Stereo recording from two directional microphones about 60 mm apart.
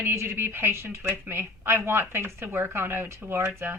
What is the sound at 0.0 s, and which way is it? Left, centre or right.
Speech, right.